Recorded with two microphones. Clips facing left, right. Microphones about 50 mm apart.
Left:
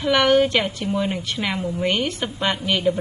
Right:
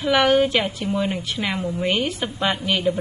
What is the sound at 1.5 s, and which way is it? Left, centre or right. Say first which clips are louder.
Speech: even; centre.